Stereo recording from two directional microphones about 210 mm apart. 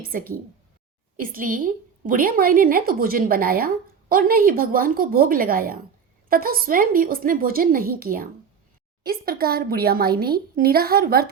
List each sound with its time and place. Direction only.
0.0 s a woman's voice: 45° right (ahead or behind)